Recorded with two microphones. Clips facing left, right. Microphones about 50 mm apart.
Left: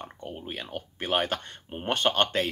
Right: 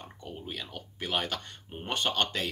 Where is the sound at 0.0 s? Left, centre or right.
Left.